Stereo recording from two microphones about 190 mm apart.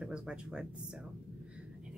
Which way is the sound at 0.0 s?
5° right (ahead or behind).